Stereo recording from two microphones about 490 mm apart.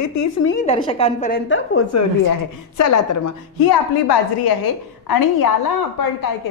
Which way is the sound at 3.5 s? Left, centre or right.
Left.